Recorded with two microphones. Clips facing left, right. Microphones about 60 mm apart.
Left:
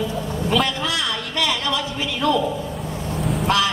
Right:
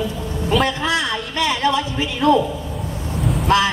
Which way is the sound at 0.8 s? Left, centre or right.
Right.